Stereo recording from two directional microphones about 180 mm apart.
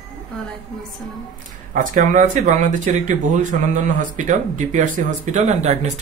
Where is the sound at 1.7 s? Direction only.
50° right (ahead or behind).